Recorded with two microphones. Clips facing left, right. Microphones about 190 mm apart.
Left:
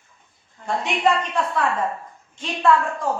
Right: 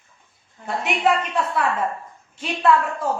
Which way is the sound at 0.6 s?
5° right (ahead or behind).